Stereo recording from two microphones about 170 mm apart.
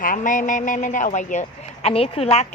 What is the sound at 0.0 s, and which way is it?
A man's voice, 50° left (ahead or behind).